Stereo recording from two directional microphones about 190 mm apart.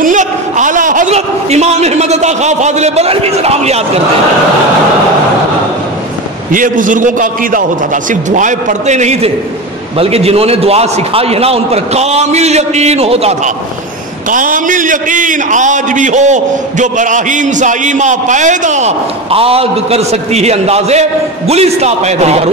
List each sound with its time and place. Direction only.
0.0 s a man's voice: 40° right (ahead or behind)
6.5 s a man's voice: 45° right (ahead or behind)
14.3 s a man's voice: 45° right (ahead or behind)